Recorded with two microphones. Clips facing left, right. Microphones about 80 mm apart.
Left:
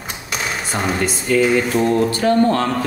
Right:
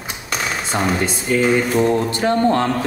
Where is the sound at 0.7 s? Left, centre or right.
Right.